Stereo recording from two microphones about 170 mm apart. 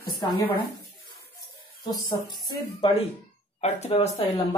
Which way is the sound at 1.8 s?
25° left (ahead or behind).